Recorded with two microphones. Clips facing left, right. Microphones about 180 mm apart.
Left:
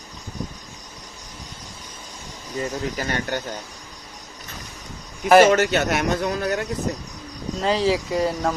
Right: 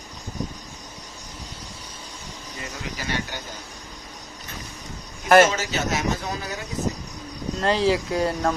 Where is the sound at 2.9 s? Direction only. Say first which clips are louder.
Left 5 dB; 50° left (ahead or behind).